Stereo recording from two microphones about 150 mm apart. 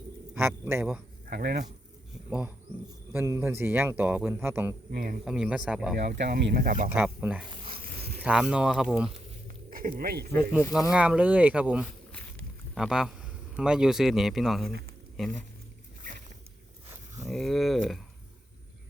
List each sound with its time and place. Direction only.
0.3 s speech: 15° right (ahead or behind)
1.3 s speech: 90° right
3.1 s speech: 15° right (ahead or behind)
4.9 s speech: 75° right (ahead or behind)
5.2 s speech: 5° right (ahead or behind)
6.1 s speech: 90° right; by 6.9 s 70° right (ahead or behind)
6.9 s speech: 10° right (ahead or behind)
7.6 s insect: 35° right (ahead or behind)
8.2 s speech: 5° right (ahead or behind)
9.6 s speech: 70° right (ahead or behind); by 10.2 s 90° right
10.9 s speech: 10° right (ahead or behind)
17.2 s speech: centre (ahead or behind)